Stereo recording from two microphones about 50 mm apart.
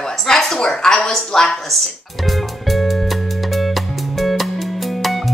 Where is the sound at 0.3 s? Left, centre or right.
Centre.